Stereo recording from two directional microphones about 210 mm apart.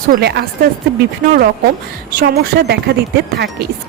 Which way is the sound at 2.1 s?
50° right (ahead or behind).